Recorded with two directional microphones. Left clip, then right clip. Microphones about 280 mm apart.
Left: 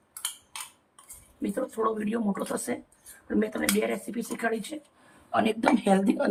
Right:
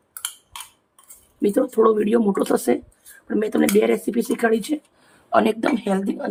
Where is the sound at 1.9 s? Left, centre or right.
Right.